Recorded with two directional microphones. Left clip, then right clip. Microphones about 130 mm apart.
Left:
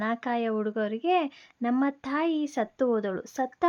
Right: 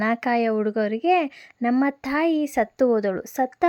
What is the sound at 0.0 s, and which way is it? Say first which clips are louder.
Speech: right 7 dB; 35° right (ahead or behind).